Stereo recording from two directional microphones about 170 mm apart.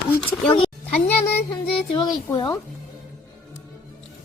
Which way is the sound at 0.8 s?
10° left (ahead or behind).